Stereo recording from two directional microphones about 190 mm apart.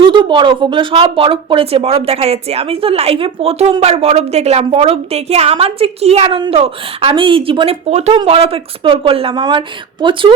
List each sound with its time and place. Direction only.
0.0 s speech: 25° right (ahead or behind)